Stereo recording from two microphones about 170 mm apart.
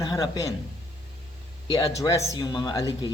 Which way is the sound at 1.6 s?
20° left (ahead or behind).